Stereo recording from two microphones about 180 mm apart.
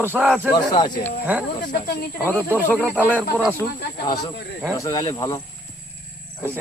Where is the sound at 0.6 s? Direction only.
25° left (ahead or behind).